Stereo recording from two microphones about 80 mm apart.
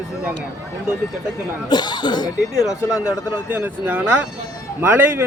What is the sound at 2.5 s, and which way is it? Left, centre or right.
Speech, centre.